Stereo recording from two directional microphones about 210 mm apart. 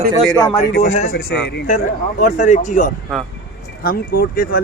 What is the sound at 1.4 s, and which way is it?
Speech, 55° left (ahead or behind).